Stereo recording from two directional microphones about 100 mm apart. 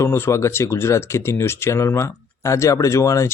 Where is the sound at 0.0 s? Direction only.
25° left (ahead or behind).